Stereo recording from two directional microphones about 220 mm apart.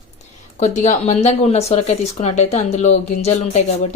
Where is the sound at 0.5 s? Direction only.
30° left (ahead or behind).